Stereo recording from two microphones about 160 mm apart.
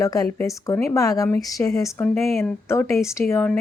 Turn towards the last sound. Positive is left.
turn(degrees=10)  # may be behind; listen again after turning